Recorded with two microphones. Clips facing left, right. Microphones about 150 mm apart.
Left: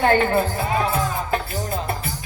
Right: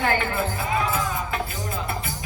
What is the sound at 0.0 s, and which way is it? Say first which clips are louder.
Speech: left 6 dB; 35° left (ahead or behind).